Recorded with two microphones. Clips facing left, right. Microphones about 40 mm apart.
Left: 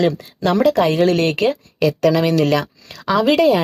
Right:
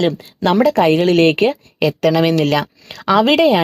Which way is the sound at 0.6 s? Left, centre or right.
Right.